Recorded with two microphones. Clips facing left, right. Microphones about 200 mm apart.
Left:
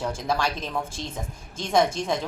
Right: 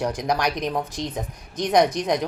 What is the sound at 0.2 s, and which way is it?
Speech, 15° right (ahead or behind).